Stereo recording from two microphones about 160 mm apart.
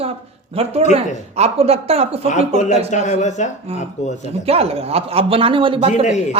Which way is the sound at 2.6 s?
50° left (ahead or behind).